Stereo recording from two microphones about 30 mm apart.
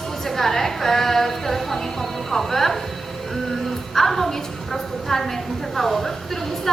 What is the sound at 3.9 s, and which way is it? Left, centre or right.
A woman's voice, centre.